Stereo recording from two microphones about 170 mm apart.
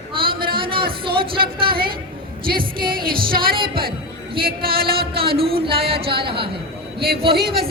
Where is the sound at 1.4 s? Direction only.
65° right (ahead or behind).